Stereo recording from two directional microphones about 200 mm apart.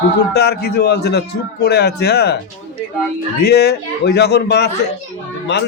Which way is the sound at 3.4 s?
55° left (ahead or behind).